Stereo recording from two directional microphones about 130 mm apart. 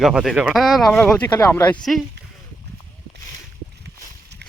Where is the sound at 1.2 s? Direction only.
15° left (ahead or behind).